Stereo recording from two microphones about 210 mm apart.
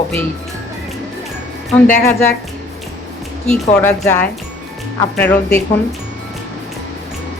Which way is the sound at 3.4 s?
5° left (ahead or behind).